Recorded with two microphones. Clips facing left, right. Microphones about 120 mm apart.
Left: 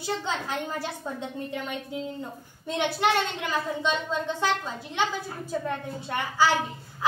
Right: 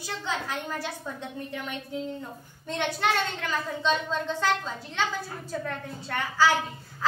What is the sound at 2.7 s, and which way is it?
A woman's voice, 15° left (ahead or behind).